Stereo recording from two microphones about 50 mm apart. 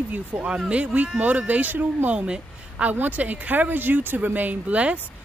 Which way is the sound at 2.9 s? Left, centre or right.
Right.